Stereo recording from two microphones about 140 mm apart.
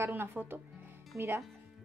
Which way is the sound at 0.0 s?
15° right (ahead or behind).